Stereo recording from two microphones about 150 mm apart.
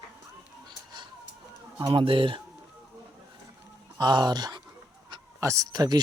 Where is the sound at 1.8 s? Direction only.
35° right (ahead or behind).